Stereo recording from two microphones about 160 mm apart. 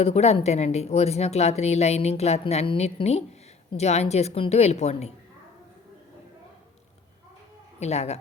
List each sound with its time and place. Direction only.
0.0 s speech: 40° left (ahead or behind)
7.8 s a woman's voice: 40° left (ahead or behind)